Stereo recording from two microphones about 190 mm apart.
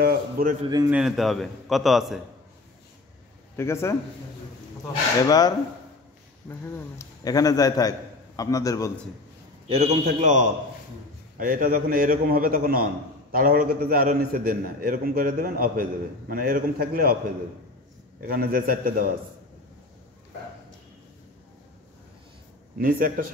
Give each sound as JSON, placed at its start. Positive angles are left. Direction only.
{"t": 0.0, "sound": "a sound", "side_deg": -50}
{"t": 0.8, "sound": "a man's voice", "side_deg": -5}
{"t": 3.5, "sound": "a man's voice", "side_deg": 15}
{"t": 5.2, "sound": "a man's voice", "side_deg": 20}
{"t": 7.0, "sound": "a man's voice", "side_deg": 20}
{"t": 9.7, "sound": "a man's voice", "side_deg": -35}
{"t": 18.2, "sound": "a man's voice", "side_deg": -50}
{"t": 22.8, "sound": "a man's voice", "side_deg": -50}